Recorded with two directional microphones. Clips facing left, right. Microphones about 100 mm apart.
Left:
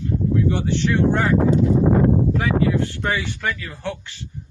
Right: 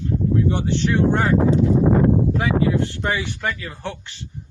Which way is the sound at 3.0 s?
20° right (ahead or behind).